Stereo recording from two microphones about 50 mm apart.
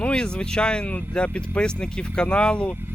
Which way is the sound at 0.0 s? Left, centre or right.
Left.